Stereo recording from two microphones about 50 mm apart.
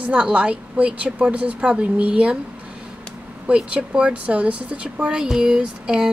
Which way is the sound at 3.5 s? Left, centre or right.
Right.